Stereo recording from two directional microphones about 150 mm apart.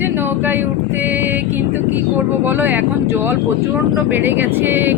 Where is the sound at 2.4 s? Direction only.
15° right (ahead or behind).